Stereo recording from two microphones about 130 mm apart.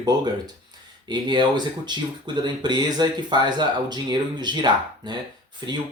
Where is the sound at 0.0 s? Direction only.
30° right (ahead or behind).